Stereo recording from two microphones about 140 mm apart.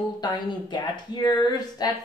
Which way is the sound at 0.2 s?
30° left (ahead or behind).